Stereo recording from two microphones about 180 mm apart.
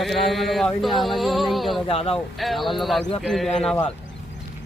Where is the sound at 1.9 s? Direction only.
35° left (ahead or behind).